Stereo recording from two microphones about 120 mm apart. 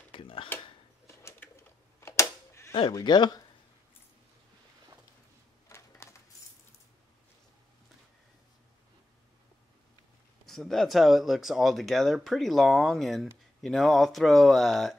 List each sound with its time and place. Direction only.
0.1 s a sound: 45° left (ahead or behind)
1.0 s a sound: 20° left (ahead or behind)
2.0 s typewriter: 25° left (ahead or behind)
2.9 s speech: 35° left (ahead or behind)
5.7 s coin: 30° left (ahead or behind)
10.4 s speech: 5° left (ahead or behind)